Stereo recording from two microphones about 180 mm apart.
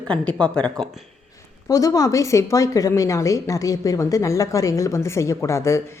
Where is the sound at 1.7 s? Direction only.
20° left (ahead or behind).